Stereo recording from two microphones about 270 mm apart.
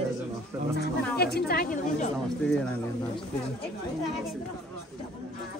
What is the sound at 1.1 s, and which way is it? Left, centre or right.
Speech, left.